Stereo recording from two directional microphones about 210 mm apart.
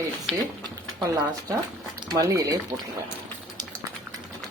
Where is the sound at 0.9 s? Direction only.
15° right (ahead or behind).